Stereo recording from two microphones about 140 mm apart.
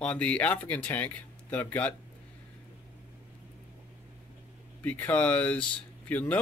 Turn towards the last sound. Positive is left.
turn(degrees=10)  # may be behind; listen again after turning